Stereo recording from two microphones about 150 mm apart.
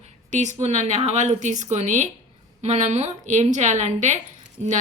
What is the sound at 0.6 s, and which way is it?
Speech, 50° right (ahead or behind).